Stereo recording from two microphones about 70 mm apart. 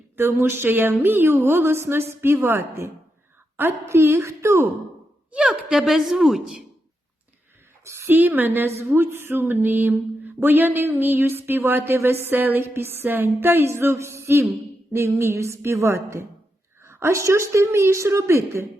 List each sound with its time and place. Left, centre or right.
0.2 s speech: right
5.3 s a woman's voice: centre
7.9 s a woman's voice: right